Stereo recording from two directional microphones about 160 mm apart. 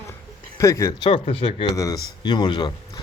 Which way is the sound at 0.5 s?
20° left (ahead or behind).